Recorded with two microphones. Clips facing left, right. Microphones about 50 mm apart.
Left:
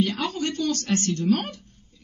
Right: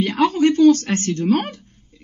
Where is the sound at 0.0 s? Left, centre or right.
Right.